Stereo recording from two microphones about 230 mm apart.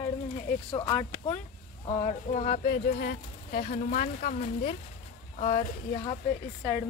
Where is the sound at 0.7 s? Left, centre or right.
Left.